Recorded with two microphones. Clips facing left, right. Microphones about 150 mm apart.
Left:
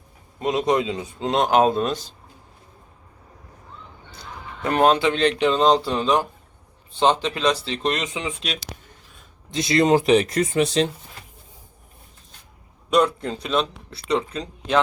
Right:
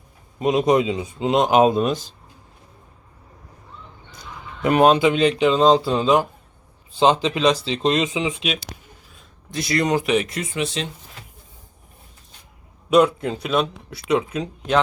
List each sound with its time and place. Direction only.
0.3 s speech: 15° right (ahead or behind)
4.6 s speech: 15° right (ahead or behind)
7.7 s speech: 20° right (ahead or behind)
8.2 s speech: 5° right (ahead or behind)
9.5 s speech: 20° left (ahead or behind); by 10.8 s 40° left (ahead or behind)
12.9 s speech: 5° right (ahead or behind)